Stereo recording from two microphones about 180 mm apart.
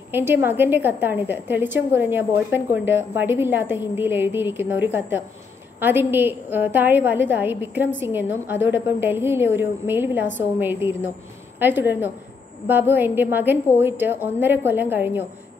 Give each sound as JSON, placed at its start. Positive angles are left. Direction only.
{"t": 0.1, "sound": "a woman's voice", "side_deg": -10}